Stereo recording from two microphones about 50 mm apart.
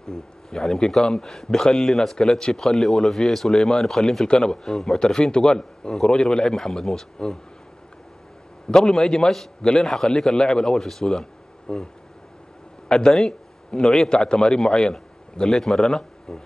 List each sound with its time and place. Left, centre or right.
0.1 s a man's voice: centre
4.3 s a man's voice: centre
8.6 s a man's voice: centre
12.9 s a man's voice: centre